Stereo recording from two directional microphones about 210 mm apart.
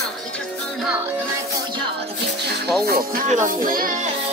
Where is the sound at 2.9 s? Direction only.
45° right (ahead or behind).